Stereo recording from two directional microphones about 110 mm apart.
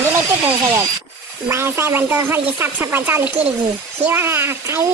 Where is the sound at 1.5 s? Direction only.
25° right (ahead or behind).